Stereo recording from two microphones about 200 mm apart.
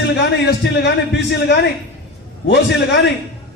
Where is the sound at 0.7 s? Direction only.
60° left (ahead or behind).